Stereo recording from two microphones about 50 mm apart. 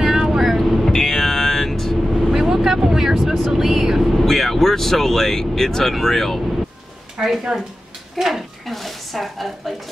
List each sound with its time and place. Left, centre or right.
0.0 s vehicle: centre
0.9 s vehicle: centre
2.3 s speech: centre
7.2 s speech: centre
8.2 s a woman's voice: centre